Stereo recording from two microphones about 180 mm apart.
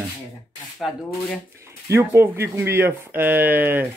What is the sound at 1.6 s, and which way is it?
Speech, 15° right (ahead or behind).